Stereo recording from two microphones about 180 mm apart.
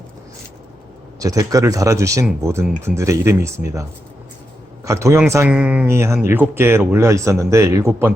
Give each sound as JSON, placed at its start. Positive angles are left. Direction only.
{"t": 1.2, "sound": "speech", "side_deg": -20}
{"t": 4.9, "sound": "speech", "side_deg": -15}